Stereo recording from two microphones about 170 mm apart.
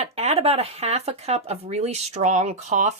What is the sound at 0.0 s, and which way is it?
Speech, 35° right (ahead or behind).